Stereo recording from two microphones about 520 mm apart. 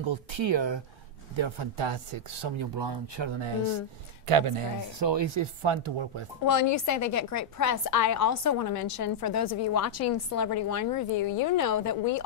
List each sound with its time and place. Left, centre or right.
0.0 s speech: right
6.4 s a woman's voice: left